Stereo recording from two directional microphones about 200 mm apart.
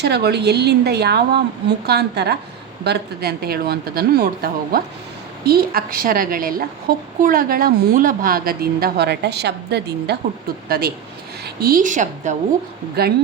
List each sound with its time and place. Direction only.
0.0 s a woman's voice: 55° right (ahead or behind); by 12.4 s 40° right (ahead or behind)